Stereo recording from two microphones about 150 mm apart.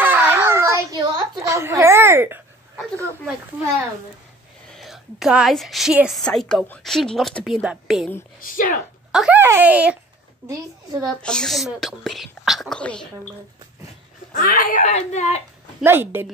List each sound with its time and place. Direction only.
0.0 s a sound: 15° right (ahead or behind)
3.6 s speech: 5° right (ahead or behind)
4.7 s a woman's voice: centre (ahead or behind)
9.1 s speech: 5° right (ahead or behind)
10.5 s a woman's voice: 25° right (ahead or behind)
11.2 s a woman's voice: 5° left (ahead or behind)
14.3 s speech: 70° left (ahead or behind); by 15.4 s 50° left (ahead or behind)
15.8 s speech: 15° right (ahead or behind)